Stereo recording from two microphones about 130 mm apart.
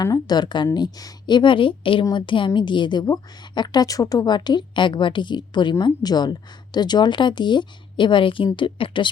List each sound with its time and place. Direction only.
0.0 s a woman's voice: 30° left (ahead or behind)